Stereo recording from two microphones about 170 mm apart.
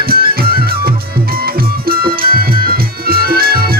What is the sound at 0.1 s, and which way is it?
Music, 60° right (ahead or behind).